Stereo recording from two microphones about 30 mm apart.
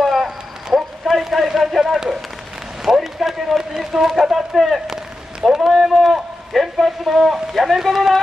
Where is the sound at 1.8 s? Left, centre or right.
Centre.